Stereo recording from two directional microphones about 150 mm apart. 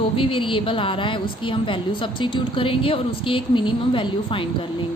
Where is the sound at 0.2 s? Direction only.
35° left (ahead or behind).